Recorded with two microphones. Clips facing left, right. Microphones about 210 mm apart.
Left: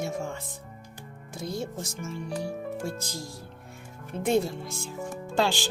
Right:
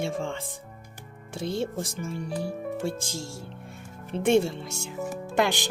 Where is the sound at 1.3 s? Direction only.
30° right (ahead or behind).